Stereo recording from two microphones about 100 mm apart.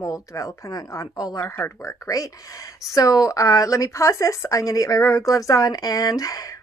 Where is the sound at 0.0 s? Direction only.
35° left (ahead or behind).